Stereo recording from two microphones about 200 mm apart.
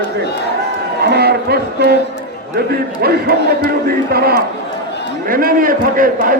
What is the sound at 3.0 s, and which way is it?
A man's voice, 50° right (ahead or behind).